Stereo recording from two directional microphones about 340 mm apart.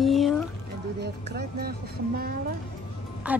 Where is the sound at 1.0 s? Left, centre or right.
Right.